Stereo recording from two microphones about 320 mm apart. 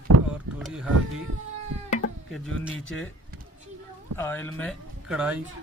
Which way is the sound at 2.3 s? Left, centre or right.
Centre.